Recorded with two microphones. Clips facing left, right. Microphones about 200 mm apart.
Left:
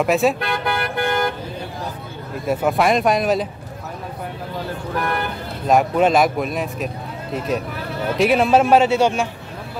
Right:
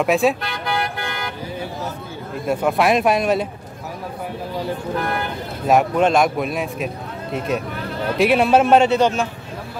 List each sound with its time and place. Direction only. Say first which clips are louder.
0.0 s a man's voice: even; centre (ahead or behind)
0.4 s vehicle: left 2 dB; 55° left (ahead or behind)
2.4 s a man's voice: even; centre (ahead or behind)
5.7 s a man's voice: even; centre (ahead or behind)